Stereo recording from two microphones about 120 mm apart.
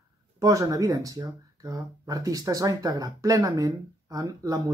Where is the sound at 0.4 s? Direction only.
30° right (ahead or behind).